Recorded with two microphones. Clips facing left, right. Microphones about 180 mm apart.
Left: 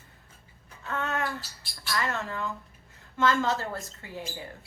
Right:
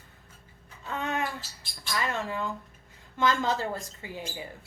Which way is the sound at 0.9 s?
15° right (ahead or behind).